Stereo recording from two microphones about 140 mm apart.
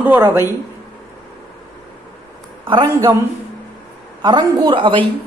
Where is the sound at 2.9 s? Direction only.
20° right (ahead or behind).